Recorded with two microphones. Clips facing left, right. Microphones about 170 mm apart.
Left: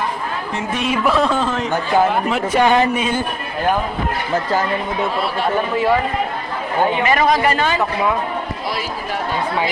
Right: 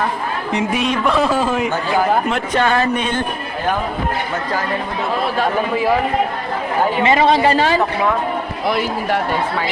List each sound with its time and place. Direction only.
0.8 s a man's voice: centre (ahead or behind)
2.3 s speech: 10° left (ahead or behind)
7.0 s speech: 25° right (ahead or behind)
8.6 s speech: 60° right (ahead or behind)